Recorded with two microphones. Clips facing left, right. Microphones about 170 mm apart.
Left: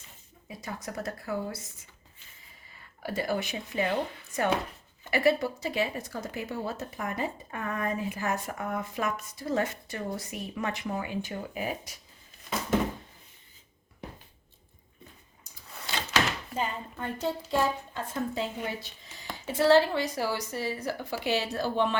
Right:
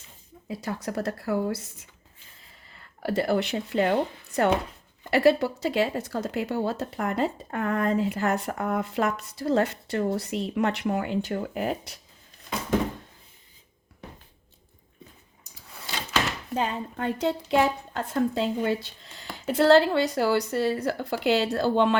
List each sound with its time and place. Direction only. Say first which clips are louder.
0.4 s speech: right 7 dB; 70° right (ahead or behind)
3.0 s speech: right 6 dB; 65° right (ahead or behind)
16.6 s speech: right 6 dB; 75° right (ahead or behind)